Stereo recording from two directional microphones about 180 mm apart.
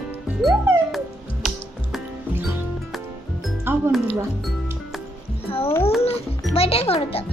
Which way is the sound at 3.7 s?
10° right (ahead or behind).